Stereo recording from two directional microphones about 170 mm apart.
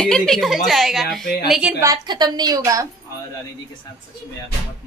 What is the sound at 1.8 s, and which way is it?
A woman's voice, 25° right (ahead or behind).